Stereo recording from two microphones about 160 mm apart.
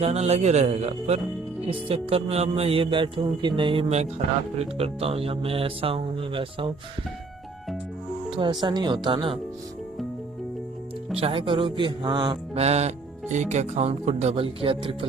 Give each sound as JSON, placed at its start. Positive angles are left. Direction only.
{"t": 0.0, "sound": "speech", "side_deg": -40}
{"t": 8.3, "sound": "speech", "side_deg": -30}
{"t": 11.2, "sound": "speech", "side_deg": -35}